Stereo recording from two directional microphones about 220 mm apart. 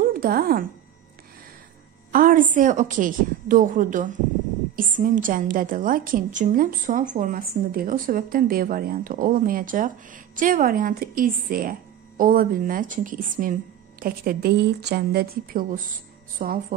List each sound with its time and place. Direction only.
0.0 s speech: 40° right (ahead or behind)
2.1 s a woman's voice: 40° right (ahead or behind)